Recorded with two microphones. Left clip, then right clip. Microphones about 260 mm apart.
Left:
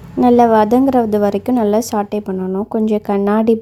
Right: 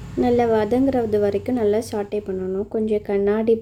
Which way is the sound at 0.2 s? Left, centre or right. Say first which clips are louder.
Left 8 dB; left.